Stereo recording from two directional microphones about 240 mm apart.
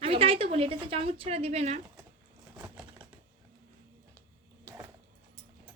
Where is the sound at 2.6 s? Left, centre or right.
Centre.